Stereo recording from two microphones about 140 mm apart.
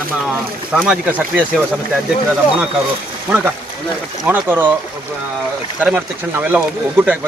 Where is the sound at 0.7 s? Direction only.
Centre (ahead or behind).